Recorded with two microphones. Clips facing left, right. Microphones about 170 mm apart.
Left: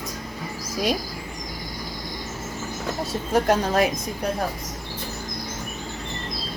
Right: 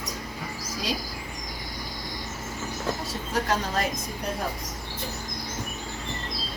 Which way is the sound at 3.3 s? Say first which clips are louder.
Left 7 dB; 55° left (ahead or behind).